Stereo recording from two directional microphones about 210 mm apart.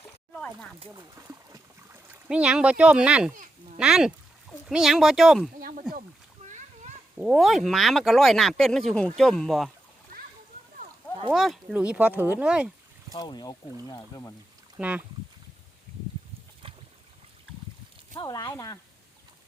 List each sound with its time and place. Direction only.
0.3 s a sound: centre (ahead or behind)
1.1 s boat: 15° right (ahead or behind)
3.3 s a sound: 40° right (ahead or behind)
3.8 s speech: 5° right (ahead or behind)
5.5 s a sound: 40° right (ahead or behind)
7.2 s speech: 5° right (ahead or behind)
11.3 s speech: centre (ahead or behind)
13.1 s speech: 20° left (ahead or behind)
14.8 s speech: 5° right (ahead or behind)
18.2 s speech: 20° left (ahead or behind)